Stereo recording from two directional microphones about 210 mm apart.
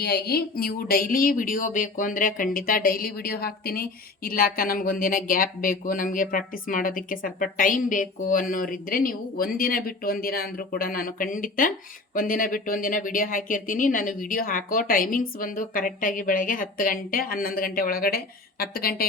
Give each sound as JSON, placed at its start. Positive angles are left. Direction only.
{"t": 0.0, "sound": "a woman's voice", "side_deg": 50}